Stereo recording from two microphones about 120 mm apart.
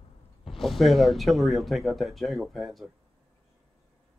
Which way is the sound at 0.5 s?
Centre (ahead or behind).